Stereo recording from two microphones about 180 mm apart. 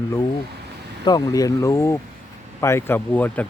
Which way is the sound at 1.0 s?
20° left (ahead or behind).